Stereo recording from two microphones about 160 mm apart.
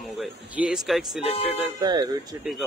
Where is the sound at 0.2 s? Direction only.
5° right (ahead or behind).